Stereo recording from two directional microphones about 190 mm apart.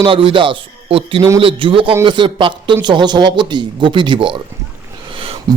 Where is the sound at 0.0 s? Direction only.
25° right (ahead or behind).